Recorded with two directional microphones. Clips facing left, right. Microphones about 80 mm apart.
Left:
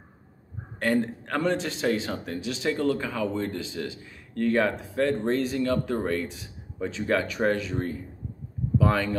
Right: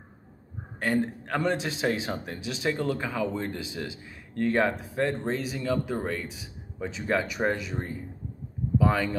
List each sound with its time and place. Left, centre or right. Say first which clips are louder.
0.7 s a man's voice: left 2 dB; centre
5.1 s a man's voice: left 5 dB; centre